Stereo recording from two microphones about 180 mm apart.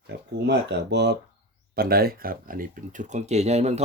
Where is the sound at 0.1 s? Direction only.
55° right (ahead or behind).